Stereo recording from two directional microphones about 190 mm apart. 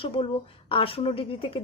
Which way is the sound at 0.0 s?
30° left (ahead or behind).